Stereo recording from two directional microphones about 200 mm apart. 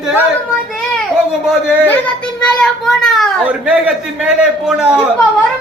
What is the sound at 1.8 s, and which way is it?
A child's voice, 10° left (ahead or behind).